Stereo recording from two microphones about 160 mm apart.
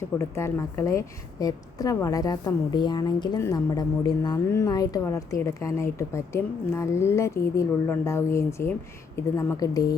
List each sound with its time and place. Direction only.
0.2 s a woman's voice: 15° left (ahead or behind)